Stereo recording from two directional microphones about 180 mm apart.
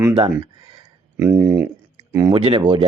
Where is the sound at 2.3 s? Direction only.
30° right (ahead or behind).